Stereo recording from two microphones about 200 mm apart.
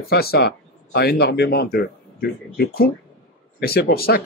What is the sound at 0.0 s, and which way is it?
Speech, 50° left (ahead or behind).